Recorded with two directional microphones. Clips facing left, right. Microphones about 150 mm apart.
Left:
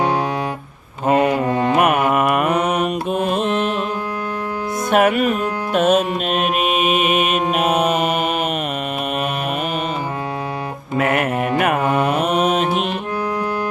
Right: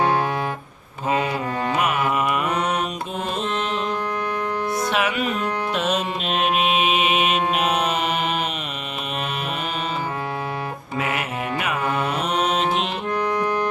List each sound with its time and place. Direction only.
1.0 s mantra: 60° left (ahead or behind)
4.9 s music: 50° left (ahead or behind)
10.9 s mantra: 55° left (ahead or behind)
12.7 s music: 10° left (ahead or behind)